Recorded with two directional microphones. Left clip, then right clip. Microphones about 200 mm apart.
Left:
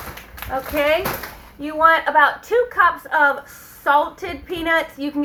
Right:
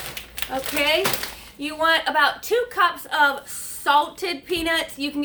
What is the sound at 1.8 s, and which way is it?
A woman's voice, 45° right (ahead or behind).